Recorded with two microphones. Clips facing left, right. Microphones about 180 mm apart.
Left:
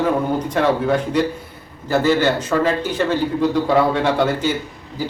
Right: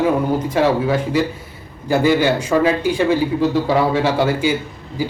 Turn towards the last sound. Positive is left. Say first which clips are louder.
# right 3 dB
turn(degrees=-10)  # may be behind; listen again after turning